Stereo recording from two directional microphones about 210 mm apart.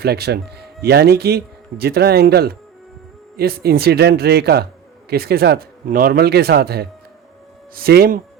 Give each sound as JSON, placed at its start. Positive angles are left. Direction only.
{"t": 0.0, "sound": "a man's voice", "side_deg": -50}